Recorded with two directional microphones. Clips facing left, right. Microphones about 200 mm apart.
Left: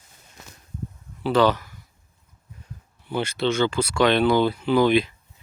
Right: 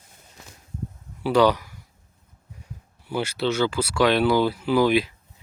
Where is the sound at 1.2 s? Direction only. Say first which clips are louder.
Right 1 dB; 10° right (ahead or behind).